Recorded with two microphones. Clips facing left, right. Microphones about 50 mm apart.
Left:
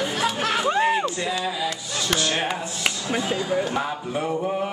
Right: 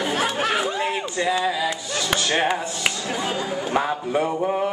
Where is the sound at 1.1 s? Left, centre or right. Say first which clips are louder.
Right 4 dB; centre.